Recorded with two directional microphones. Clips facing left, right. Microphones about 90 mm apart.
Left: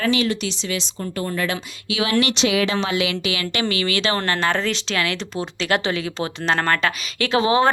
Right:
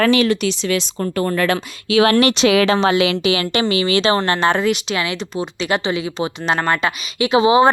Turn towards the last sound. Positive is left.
turn(degrees=-15)  # may be behind; listen again after turning